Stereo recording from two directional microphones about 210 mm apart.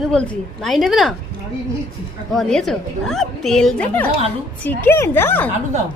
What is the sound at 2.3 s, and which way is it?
A woman's voice, centre (ahead or behind).